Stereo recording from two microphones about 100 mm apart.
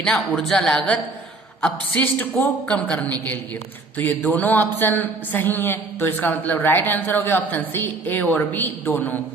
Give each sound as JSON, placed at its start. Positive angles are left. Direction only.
{"t": 0.0, "sound": "a man's voice", "side_deg": 5}